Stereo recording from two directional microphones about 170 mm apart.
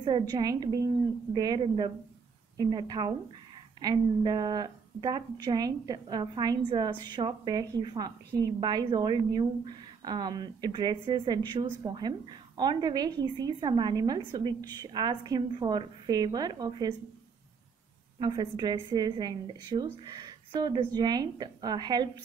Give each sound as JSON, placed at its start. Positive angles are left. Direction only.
{"t": 0.0, "sound": "a woman's voice", "side_deg": -25}
{"t": 18.2, "sound": "a woman's voice", "side_deg": -25}